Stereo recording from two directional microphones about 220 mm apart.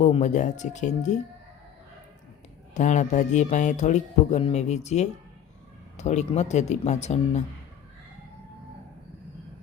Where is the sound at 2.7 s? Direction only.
35° left (ahead or behind).